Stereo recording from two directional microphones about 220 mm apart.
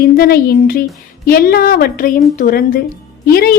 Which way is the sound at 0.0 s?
45° left (ahead or behind).